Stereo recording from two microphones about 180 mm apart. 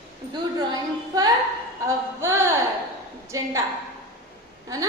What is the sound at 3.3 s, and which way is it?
Speech, 15° right (ahead or behind).